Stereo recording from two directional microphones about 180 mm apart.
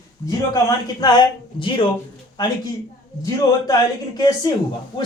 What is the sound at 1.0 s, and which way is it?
Speech, 20° left (ahead or behind).